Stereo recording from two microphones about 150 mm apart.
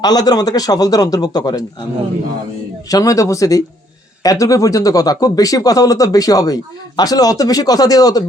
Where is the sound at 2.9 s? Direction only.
25° left (ahead or behind).